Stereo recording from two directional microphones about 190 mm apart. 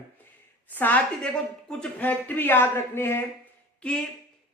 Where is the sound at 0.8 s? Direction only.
10° left (ahead or behind).